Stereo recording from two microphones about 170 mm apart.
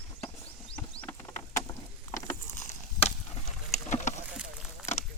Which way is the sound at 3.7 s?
45° left (ahead or behind).